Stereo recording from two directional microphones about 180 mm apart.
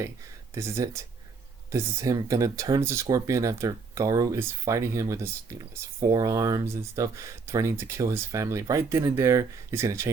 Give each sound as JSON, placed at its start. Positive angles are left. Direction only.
{"t": 0.5, "sound": "speech", "side_deg": -15}